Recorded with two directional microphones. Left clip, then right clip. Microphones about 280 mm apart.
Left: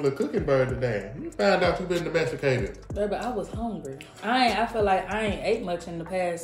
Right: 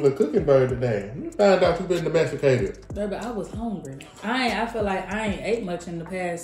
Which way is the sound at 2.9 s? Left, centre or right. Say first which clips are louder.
Left 1 dB; centre.